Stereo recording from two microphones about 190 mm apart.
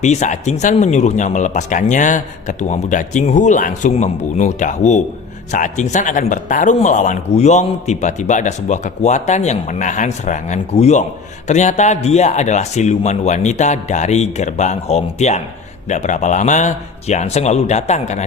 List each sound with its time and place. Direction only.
0.0 s speech: 40° left (ahead or behind)